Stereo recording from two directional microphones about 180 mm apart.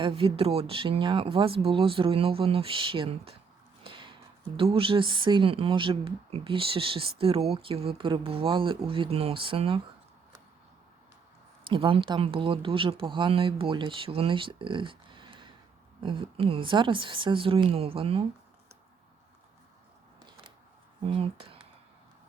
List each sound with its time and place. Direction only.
0.0 s speech: 30° right (ahead or behind)
3.8 s a sound: 30° right (ahead or behind)
4.5 s speech: 30° right (ahead or behind)
11.7 s speech: 30° right (ahead or behind)
21.0 s speech: 30° right (ahead or behind)